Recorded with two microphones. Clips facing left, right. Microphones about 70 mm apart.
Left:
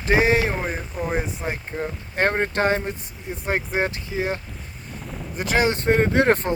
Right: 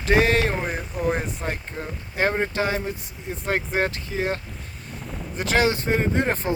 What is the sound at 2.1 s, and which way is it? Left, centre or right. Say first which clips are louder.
Speech: left 1 dB; left.